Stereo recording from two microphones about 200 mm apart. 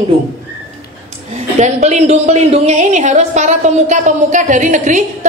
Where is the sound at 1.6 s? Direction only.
35° right (ahead or behind).